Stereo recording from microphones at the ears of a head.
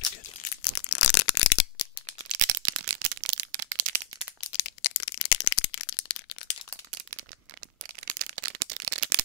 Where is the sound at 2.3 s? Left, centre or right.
Right.